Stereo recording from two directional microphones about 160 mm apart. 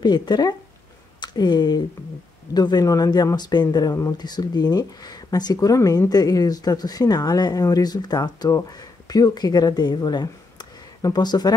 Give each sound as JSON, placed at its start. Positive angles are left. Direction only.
{"t": 0.0, "sound": "speech", "side_deg": 25}